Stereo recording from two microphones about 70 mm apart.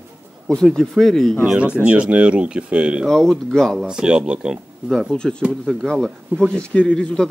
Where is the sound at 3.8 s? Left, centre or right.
Centre.